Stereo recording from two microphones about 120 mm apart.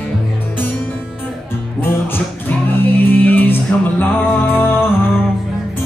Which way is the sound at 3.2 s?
15° left (ahead or behind).